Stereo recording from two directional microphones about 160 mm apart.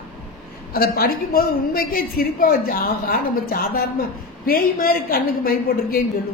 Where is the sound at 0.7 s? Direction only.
70° left (ahead or behind).